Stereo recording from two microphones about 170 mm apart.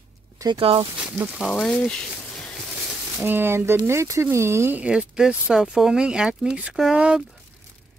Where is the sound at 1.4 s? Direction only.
5° left (ahead or behind).